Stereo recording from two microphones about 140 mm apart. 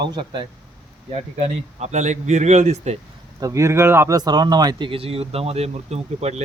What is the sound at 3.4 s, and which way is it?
Speech, 20° right (ahead or behind).